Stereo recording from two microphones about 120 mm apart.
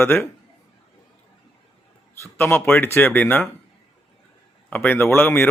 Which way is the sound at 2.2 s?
20° left (ahead or behind).